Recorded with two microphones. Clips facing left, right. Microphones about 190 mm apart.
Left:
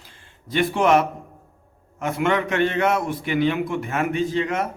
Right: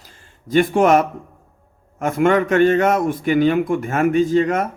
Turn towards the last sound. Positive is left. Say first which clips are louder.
# right 6 dB
turn(degrees=-45)  # may be behind; listen again after turning